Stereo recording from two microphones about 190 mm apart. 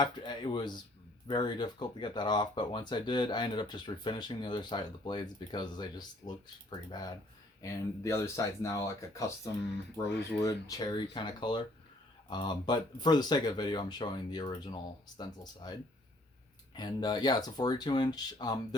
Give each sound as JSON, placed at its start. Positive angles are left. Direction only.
{"t": 0.0, "sound": "speech", "side_deg": 25}